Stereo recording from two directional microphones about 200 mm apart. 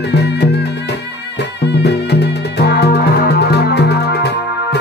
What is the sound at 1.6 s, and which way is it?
Music, 60° left (ahead or behind).